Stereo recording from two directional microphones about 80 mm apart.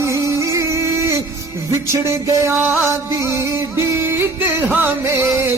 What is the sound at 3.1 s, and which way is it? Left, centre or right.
Music, right.